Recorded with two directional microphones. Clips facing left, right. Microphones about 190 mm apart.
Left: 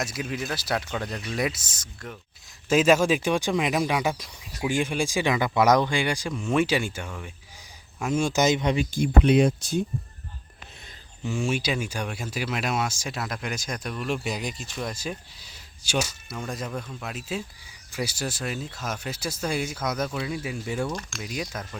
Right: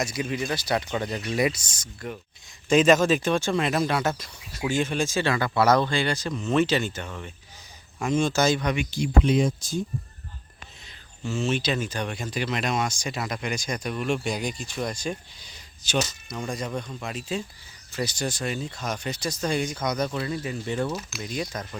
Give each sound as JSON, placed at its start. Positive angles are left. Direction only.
{"t": 0.0, "sound": "speech", "side_deg": 0}
{"t": 8.9, "sound": "speech", "side_deg": 55}
{"t": 11.2, "sound": "speech", "side_deg": 15}
{"t": 20.8, "sound": "speech", "side_deg": -5}